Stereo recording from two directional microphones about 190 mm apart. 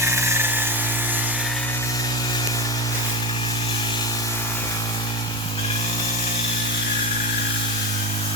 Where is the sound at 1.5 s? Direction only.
5° left (ahead or behind).